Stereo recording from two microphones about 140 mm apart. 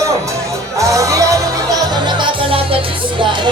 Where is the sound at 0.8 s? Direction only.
25° right (ahead or behind); by 2.7 s 40° right (ahead or behind).